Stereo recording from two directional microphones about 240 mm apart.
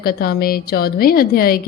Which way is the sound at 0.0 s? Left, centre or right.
Left.